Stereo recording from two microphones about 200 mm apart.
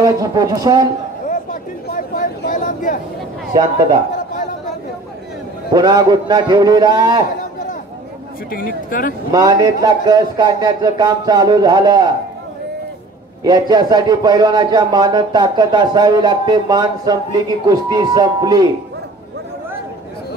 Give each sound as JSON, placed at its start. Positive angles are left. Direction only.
{"t": 0.0, "sound": "speech", "side_deg": -20}
{"t": 1.3, "sound": "a sound", "side_deg": 45}
{"t": 5.7, "sound": "speech", "side_deg": -20}
{"t": 8.5, "sound": "speech", "side_deg": 45}
{"t": 9.3, "sound": "speech", "side_deg": -20}
{"t": 13.4, "sound": "speech", "side_deg": -20}